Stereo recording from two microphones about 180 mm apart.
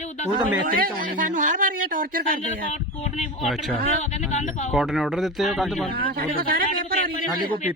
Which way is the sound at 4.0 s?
40° left (ahead or behind).